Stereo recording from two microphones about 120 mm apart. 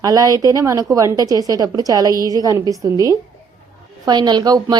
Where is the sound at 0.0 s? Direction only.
30° right (ahead or behind).